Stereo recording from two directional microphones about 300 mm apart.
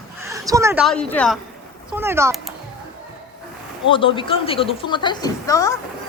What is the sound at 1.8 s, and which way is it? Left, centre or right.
Speech, centre.